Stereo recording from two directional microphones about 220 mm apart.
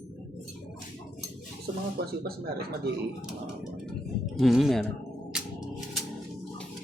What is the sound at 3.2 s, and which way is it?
Speech, 5° right (ahead or behind).